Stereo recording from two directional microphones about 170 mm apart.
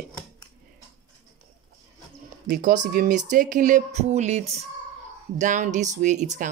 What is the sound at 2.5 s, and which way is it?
Speech, 50° right (ahead or behind).